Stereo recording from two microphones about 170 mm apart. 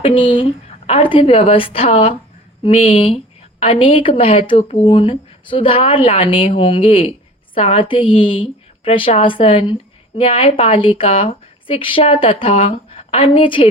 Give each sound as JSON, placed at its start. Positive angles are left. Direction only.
{"t": 0.0, "sound": "a woman's voice", "side_deg": 30}